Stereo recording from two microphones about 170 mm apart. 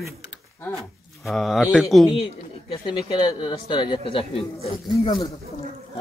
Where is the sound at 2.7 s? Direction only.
25° left (ahead or behind).